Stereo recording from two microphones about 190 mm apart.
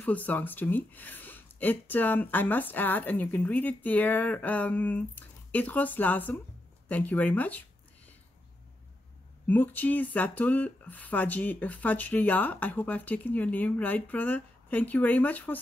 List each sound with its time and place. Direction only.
0.0 s speech: 10° left (ahead or behind)
9.5 s speech: 10° left (ahead or behind)